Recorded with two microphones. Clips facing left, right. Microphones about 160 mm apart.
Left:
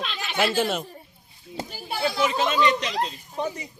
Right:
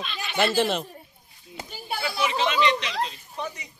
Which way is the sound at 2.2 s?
45° left (ahead or behind).